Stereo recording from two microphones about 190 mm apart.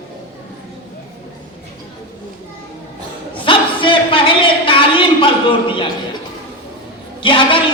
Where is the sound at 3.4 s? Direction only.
25° left (ahead or behind).